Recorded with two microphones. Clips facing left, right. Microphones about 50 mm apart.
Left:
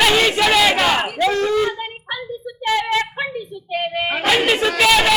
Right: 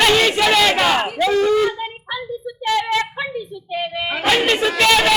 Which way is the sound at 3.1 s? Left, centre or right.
Left.